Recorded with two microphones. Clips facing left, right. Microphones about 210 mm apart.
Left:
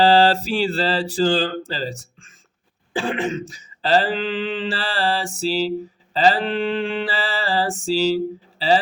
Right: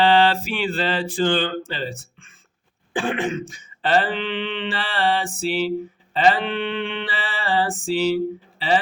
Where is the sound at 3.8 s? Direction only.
30° left (ahead or behind).